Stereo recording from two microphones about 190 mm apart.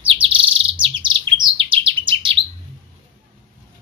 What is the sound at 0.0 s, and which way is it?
Bird, 30° right (ahead or behind).